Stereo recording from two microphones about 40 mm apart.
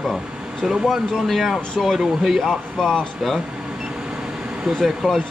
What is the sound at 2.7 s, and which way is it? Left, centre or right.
Speech, centre.